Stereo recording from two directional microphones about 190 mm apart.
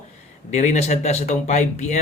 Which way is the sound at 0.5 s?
40° left (ahead or behind).